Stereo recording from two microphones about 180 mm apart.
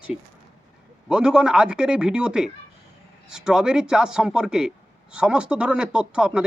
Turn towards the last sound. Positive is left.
turn(degrees=-5)  # may be behind; listen again after turning